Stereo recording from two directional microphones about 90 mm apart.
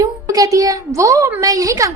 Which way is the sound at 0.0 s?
40° right (ahead or behind).